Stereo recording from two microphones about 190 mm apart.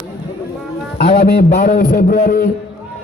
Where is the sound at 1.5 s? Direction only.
45° left (ahead or behind).